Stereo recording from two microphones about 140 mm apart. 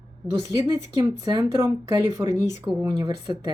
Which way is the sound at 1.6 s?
20° right (ahead or behind).